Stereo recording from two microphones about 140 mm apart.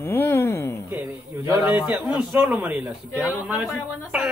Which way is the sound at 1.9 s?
Centre (ahead or behind).